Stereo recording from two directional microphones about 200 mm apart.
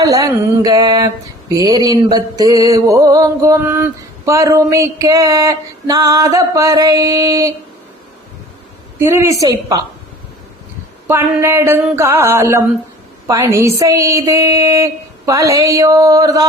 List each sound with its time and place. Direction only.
0.0 s mantra: 15° right (ahead or behind)
9.0 s mantra: 15° right (ahead or behind)
11.1 s mantra: 15° right (ahead or behind)